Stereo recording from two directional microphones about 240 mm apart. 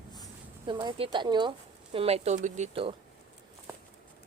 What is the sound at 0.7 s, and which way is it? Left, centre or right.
Speech, centre.